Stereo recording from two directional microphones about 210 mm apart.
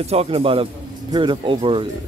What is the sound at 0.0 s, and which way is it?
Speech, 30° right (ahead or behind).